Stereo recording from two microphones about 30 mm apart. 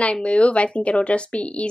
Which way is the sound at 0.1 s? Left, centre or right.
Left.